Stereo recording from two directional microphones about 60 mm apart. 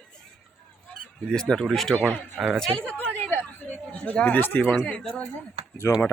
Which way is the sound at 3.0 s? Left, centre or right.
Left.